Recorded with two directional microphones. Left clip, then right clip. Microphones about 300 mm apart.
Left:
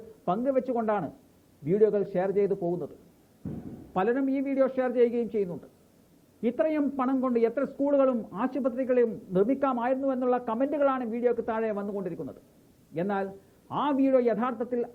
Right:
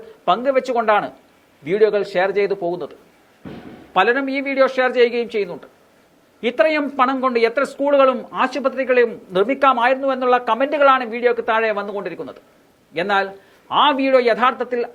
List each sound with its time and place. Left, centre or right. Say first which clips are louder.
0.3 s speech: right 10 dB; centre
2.6 s speech: right 8 dB; right
3.4 s a man's voice: right 5 dB; centre